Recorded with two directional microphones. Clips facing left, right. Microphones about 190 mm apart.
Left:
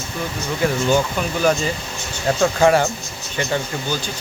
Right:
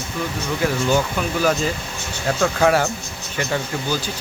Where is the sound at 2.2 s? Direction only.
5° left (ahead or behind).